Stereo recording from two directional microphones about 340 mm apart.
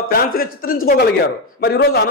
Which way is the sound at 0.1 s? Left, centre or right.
Left.